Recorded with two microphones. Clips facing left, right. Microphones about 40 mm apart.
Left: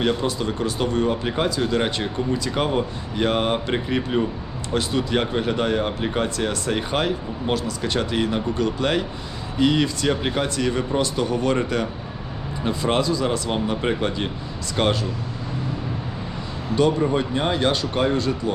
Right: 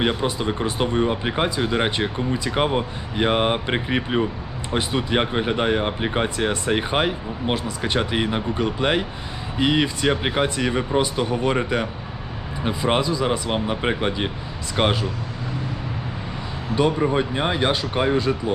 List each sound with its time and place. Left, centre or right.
0.0 s speech: centre
16.7 s speech: centre